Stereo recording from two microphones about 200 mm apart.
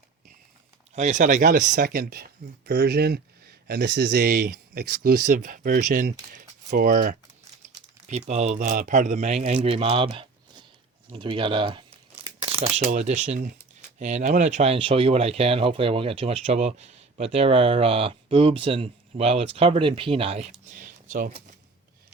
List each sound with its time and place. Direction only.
0.9 s speech: 35° right (ahead or behind)